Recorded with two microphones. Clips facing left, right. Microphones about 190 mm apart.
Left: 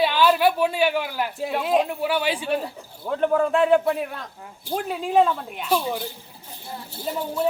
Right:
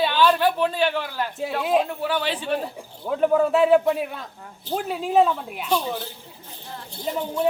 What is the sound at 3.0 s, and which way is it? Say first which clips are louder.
Speech: right 1 dB; 5° right (ahead or behind).